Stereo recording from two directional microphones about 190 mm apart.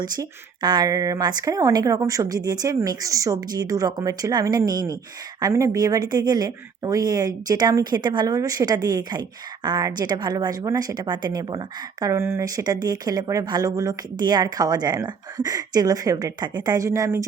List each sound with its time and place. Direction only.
0.0 s a woman's voice: 20° right (ahead or behind)